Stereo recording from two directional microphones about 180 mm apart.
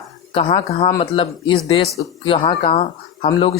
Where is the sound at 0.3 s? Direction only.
30° left (ahead or behind).